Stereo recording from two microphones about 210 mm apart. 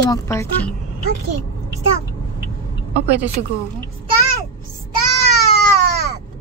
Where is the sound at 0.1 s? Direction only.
15° left (ahead or behind).